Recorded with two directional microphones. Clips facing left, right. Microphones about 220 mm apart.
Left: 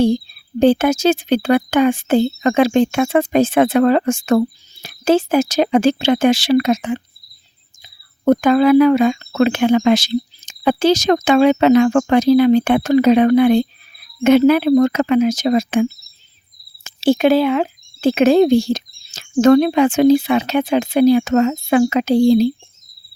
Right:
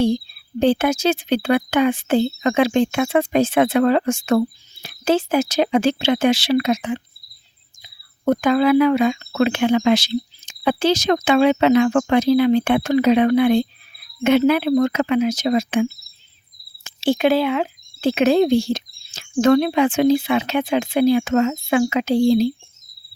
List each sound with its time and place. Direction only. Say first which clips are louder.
0.6 s speech: left 4 dB; 45° left (ahead or behind)